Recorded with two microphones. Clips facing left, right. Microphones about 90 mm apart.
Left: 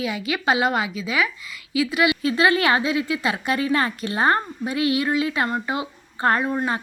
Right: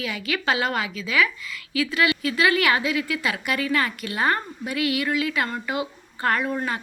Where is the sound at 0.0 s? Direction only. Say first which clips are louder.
Left 3 dB; 20° left (ahead or behind).